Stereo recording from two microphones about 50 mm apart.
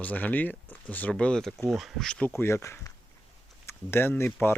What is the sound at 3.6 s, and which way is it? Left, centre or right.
Speech, left.